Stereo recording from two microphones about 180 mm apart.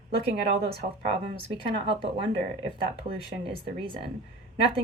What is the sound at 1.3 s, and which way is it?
A woman's voice, 30° right (ahead or behind).